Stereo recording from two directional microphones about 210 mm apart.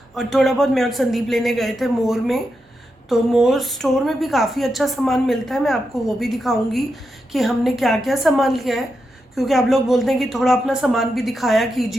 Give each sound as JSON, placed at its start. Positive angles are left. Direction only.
{"t": 0.1, "sound": "a woman's voice", "side_deg": 0}